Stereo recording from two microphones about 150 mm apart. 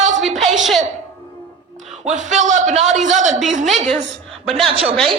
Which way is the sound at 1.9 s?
55° right (ahead or behind).